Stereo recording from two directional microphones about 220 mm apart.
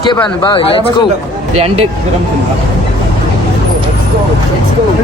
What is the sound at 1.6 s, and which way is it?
Speech, 25° right (ahead or behind).